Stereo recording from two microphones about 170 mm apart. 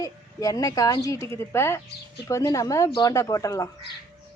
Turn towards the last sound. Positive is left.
turn(degrees=20)  # may be behind; listen again after turning